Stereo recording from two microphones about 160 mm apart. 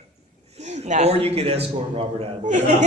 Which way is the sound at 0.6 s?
45° right (ahead or behind).